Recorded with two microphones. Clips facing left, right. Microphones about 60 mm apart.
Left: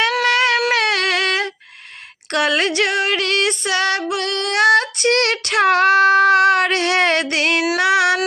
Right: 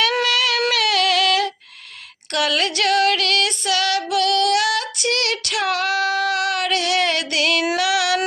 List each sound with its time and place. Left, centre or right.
0.3 s a sound: left
0.7 s music: left
7.8 s female singing: left